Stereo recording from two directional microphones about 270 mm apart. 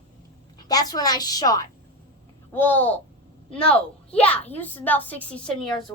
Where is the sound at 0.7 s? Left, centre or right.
Centre.